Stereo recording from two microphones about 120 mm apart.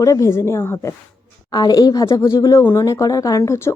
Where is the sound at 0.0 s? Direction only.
25° left (ahead or behind).